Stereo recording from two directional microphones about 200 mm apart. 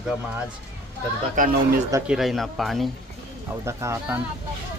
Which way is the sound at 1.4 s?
45° right (ahead or behind).